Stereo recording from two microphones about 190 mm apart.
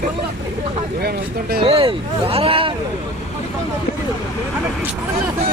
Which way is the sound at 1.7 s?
30° right (ahead or behind).